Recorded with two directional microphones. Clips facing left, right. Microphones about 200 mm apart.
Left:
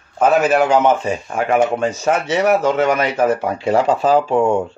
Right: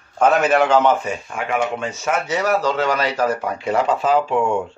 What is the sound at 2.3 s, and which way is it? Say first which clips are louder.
Speech: left 4 dB; 20° left (ahead or behind).